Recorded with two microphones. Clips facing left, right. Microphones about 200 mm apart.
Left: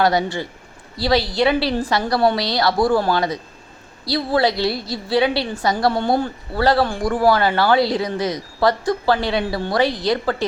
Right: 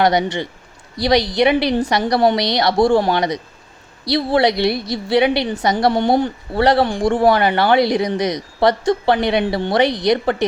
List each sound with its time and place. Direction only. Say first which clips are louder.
0.0 s a woman's voice: right 2 dB; 20° right (ahead or behind)